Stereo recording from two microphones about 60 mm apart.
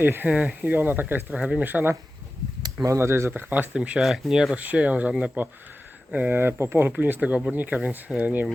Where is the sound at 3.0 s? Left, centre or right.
Right.